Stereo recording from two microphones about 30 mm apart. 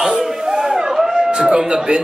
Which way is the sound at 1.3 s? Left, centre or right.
Right.